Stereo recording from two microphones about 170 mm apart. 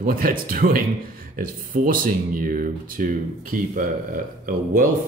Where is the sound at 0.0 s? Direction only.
55° right (ahead or behind).